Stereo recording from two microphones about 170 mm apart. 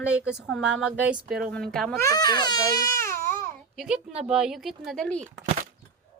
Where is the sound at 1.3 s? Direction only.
65° right (ahead or behind).